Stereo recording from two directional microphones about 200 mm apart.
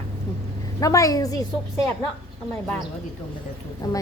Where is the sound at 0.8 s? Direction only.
15° left (ahead or behind).